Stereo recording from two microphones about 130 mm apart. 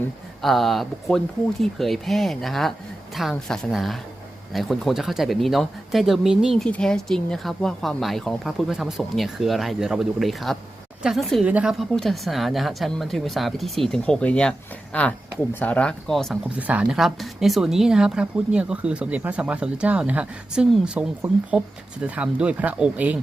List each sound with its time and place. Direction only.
0.4 s speech: centre (ahead or behind)
16.6 s speech: 10° right (ahead or behind)